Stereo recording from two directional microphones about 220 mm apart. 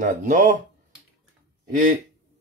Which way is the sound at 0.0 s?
35° right (ahead or behind).